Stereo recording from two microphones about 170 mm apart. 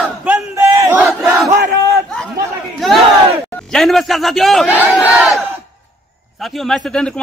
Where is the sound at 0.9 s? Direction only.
5° right (ahead or behind).